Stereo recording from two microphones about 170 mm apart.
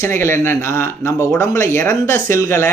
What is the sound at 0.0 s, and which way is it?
Speech, 15° left (ahead or behind).